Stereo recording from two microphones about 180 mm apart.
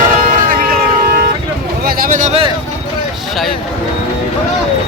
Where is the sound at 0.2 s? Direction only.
50° right (ahead or behind).